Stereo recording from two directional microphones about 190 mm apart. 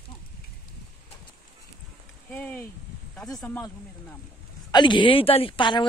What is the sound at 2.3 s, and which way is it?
A man's voice, 10° left (ahead or behind).